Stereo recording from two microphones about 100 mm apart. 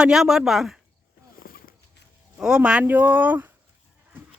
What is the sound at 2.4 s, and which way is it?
Speech, 5° right (ahead or behind).